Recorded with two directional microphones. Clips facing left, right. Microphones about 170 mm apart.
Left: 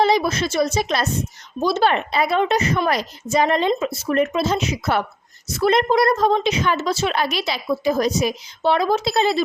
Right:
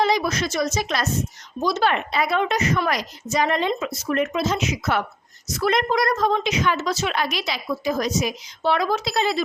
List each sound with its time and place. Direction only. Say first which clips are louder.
0.0 s a woman's voice: left 3 dB; 30° left (ahead or behind)